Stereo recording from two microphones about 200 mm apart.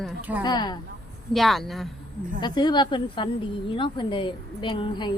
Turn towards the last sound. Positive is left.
turn(degrees=25)  # may be behind; listen again after turning